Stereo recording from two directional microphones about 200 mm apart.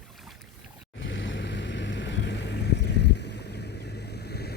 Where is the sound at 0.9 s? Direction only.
65° left (ahead or behind).